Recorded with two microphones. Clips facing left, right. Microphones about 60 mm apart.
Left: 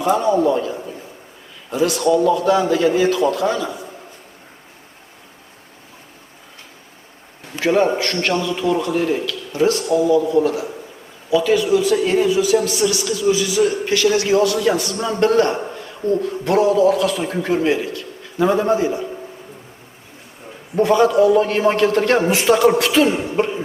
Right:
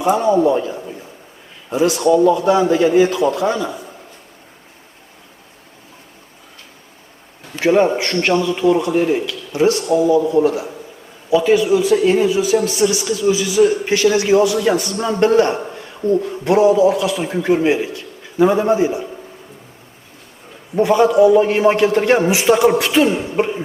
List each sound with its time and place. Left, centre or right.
0.0 s a man's voice: centre
7.6 s a man's voice: centre
9.7 s a man's voice: right
10.0 s a man's voice: centre
12.0 s a man's voice: centre
14.3 s a man's voice: centre
15.1 s a man's voice: centre
17.6 s a man's voice: centre
20.7 s a man's voice: centre